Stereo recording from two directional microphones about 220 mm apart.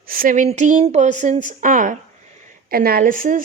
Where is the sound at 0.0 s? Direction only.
40° right (ahead or behind).